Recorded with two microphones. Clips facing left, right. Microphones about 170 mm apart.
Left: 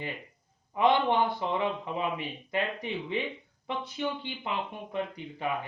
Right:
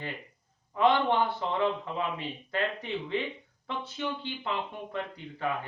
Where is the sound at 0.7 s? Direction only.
15° left (ahead or behind).